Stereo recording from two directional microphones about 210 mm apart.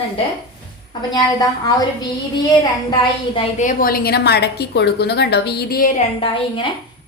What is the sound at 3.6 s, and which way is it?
A woman's voice, 40° left (ahead or behind).